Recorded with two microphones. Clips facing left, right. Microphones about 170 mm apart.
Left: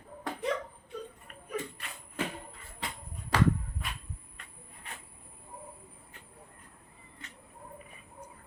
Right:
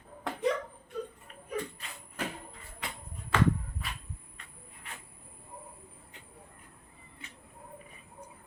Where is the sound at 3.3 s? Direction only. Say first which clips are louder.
Even; 35° left (ahead or behind).